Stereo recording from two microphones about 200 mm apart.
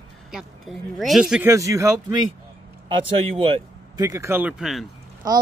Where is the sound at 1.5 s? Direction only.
15° right (ahead or behind).